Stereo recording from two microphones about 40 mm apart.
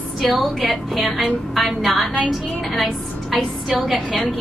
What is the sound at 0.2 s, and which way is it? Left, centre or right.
A woman's voice, centre.